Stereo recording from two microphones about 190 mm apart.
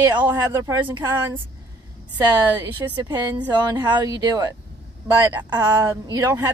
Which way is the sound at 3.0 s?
20° right (ahead or behind).